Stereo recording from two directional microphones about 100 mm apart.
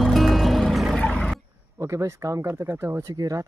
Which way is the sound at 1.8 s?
30° right (ahead or behind).